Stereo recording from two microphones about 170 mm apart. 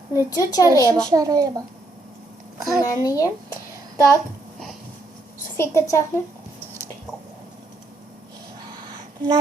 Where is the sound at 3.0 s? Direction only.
20° left (ahead or behind).